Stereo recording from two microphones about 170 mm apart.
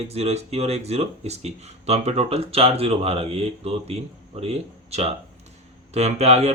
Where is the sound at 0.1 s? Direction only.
40° right (ahead or behind).